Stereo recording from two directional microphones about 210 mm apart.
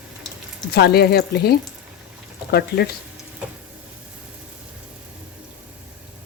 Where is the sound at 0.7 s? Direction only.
50° left (ahead or behind).